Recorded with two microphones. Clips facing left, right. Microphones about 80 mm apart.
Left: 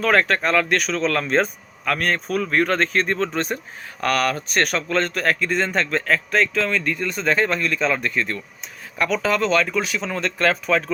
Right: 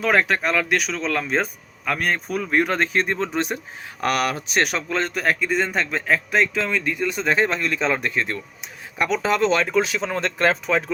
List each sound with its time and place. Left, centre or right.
0.0 s speech: centre